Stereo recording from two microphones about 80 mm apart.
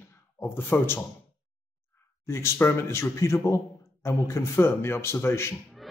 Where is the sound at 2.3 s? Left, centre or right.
Left.